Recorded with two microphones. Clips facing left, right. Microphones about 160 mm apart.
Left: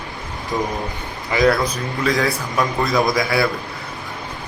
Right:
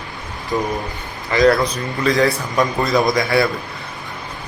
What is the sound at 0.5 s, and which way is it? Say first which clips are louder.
A man's voice: right 2 dB; 10° left (ahead or behind).